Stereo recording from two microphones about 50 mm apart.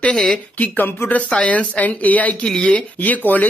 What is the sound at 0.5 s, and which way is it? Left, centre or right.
Speech, left.